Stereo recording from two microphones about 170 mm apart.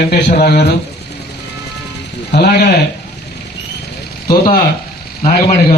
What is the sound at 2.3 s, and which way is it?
Speech, 70° left (ahead or behind).